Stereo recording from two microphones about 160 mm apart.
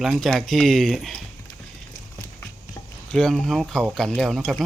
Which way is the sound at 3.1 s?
5° left (ahead or behind).